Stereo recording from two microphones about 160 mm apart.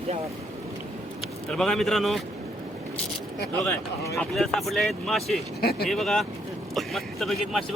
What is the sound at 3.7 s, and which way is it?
Speech, 20° left (ahead or behind).